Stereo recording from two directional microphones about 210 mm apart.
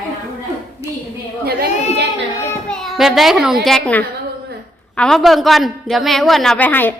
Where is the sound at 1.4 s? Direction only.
50° right (ahead or behind).